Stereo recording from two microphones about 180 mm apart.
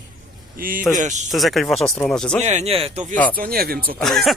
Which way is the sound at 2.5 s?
35° right (ahead or behind).